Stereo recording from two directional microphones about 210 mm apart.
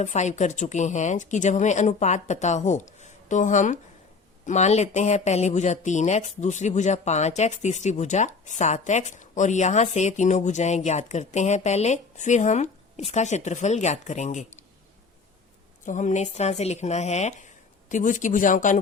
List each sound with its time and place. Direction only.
0.0 s speech: 35° left (ahead or behind)
15.9 s speech: 35° left (ahead or behind)